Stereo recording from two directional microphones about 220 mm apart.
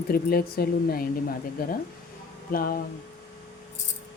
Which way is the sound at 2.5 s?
40° left (ahead or behind).